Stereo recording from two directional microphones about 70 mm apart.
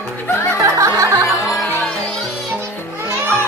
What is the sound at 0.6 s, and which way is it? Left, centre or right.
Music, right.